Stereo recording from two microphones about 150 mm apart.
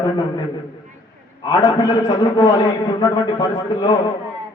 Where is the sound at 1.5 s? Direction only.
25° left (ahead or behind).